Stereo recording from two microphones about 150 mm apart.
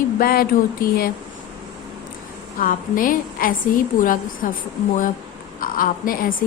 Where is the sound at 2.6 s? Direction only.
70° left (ahead or behind).